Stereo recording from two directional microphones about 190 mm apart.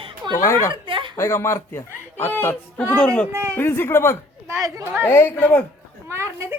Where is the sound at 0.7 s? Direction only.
25° right (ahead or behind).